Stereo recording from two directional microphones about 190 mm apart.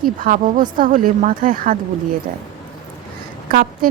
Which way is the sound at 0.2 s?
45° right (ahead or behind).